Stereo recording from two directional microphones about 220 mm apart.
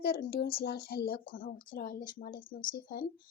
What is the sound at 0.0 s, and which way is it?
A woman's voice, 45° left (ahead or behind).